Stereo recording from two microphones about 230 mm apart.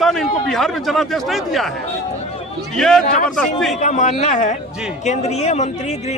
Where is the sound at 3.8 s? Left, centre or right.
Left.